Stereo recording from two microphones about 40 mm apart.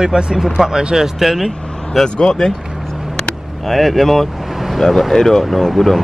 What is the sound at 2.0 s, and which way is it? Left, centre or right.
Speech, centre.